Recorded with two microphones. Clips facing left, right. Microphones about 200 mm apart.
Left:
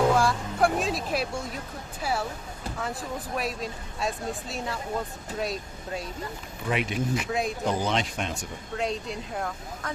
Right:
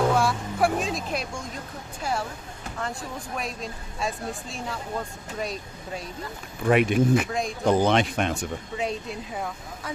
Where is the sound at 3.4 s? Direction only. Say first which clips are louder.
Left 2 dB; centre (ahead or behind).